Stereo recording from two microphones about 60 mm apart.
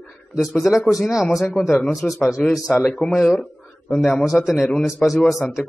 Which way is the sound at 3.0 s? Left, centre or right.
Centre.